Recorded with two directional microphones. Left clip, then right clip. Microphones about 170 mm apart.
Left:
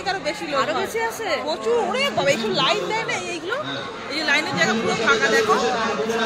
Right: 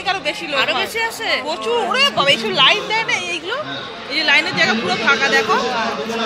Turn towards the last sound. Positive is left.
turn(degrees=-35)  # may be behind; listen again after turning